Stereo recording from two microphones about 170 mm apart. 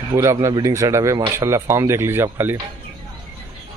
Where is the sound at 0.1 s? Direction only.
15° right (ahead or behind).